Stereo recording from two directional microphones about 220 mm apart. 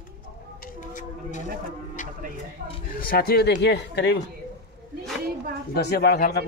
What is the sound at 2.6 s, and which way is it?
Speech, 35° right (ahead or behind).